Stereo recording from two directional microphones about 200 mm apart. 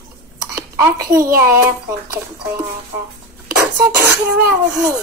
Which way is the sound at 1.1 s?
15° right (ahead or behind).